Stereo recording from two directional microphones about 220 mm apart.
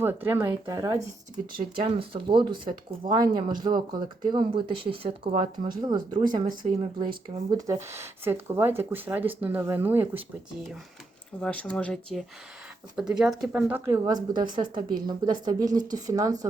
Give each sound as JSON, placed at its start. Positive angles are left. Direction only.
{"t": 0.0, "sound": "speech", "side_deg": -10}
{"t": 11.3, "sound": "speech", "side_deg": 5}